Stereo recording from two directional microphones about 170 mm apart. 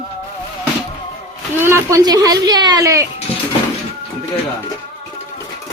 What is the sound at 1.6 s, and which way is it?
Speech, 15° right (ahead or behind).